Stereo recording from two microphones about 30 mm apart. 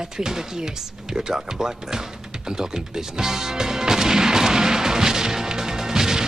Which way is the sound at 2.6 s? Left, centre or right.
Centre.